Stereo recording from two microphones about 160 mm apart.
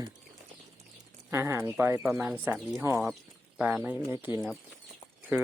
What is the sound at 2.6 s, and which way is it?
Speech, centre (ahead or behind).